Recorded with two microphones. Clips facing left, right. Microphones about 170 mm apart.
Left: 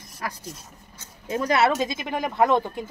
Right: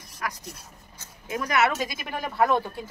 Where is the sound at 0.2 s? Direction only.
30° left (ahead or behind).